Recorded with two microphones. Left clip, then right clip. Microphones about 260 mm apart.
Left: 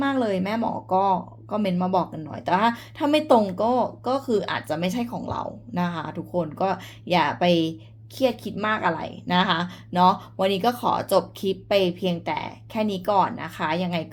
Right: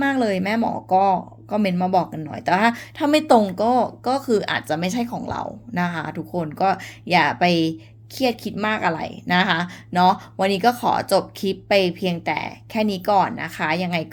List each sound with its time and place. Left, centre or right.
0.0 s a woman's voice: right